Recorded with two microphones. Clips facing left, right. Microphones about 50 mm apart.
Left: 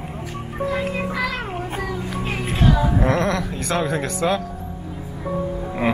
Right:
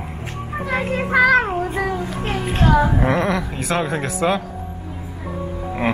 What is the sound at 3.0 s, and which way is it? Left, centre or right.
Speech, centre.